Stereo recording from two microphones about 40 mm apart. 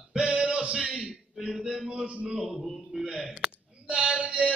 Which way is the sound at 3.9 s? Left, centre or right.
Right.